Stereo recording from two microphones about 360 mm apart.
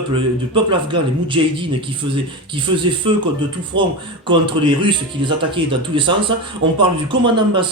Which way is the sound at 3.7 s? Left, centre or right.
Right.